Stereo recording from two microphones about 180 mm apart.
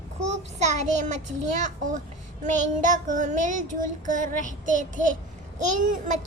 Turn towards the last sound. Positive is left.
turn(degrees=-45)  # may be behind; listen again after turning